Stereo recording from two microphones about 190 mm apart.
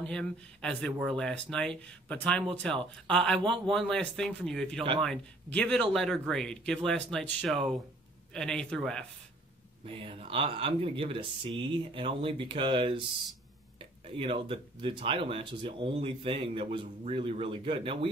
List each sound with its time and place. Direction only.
0.0 s speech: 5° left (ahead or behind)
9.8 s speech: 30° right (ahead or behind)
14.0 s speech: 30° right (ahead or behind)